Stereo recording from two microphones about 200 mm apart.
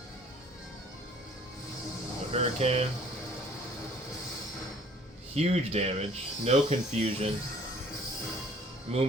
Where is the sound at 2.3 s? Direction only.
30° right (ahead or behind).